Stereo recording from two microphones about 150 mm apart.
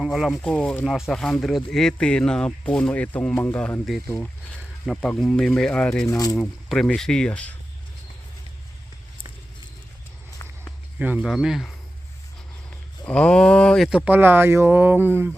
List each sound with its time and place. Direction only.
0.0 s speech: 5° right (ahead or behind)
3.8 s speech: centre (ahead or behind)
6.1 s speech: 25° left (ahead or behind)
6.3 s speech: 5° left (ahead or behind)
11.0 s speech: 5° right (ahead or behind)
13.1 s speech: 5° left (ahead or behind)
14.0 s speech: 10° right (ahead or behind)